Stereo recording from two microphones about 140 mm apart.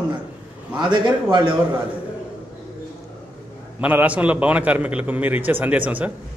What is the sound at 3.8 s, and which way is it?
A man's voice, 10° right (ahead or behind).